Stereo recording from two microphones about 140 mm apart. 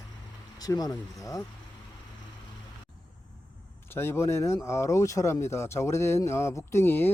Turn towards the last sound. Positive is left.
turn(degrees=15)  # may be behind; listen again after turning